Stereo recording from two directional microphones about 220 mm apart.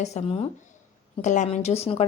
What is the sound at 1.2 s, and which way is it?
Speech, 35° left (ahead or behind).